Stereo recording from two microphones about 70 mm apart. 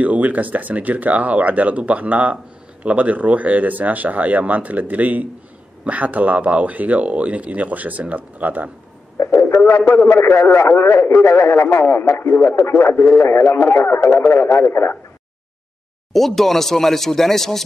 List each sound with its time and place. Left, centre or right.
0.0 s speech: right
9.2 s a man's voice: left
16.1 s speech: centre